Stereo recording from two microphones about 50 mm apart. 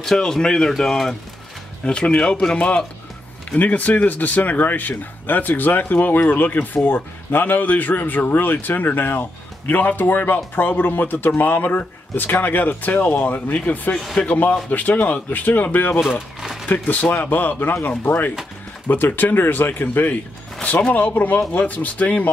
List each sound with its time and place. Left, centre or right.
0.0 s speech: centre
1.9 s speech: centre; by 13.9 s left
14.2 s speech: left
14.7 s speech: left
16.0 s speech: centre
16.6 s speech: left